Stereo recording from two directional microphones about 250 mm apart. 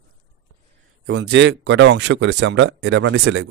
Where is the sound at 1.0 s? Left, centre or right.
Right.